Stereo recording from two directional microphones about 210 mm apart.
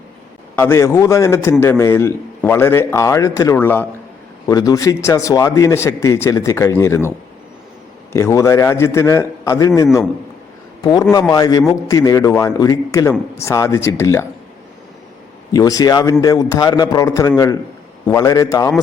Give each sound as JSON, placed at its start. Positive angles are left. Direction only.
{"t": 0.5, "sound": "a man's voice", "side_deg": 10}
{"t": 8.1, "sound": "a man's voice", "side_deg": 15}
{"t": 11.1, "sound": "a man's voice", "side_deg": 15}
{"t": 15.5, "sound": "a man's voice", "side_deg": 15}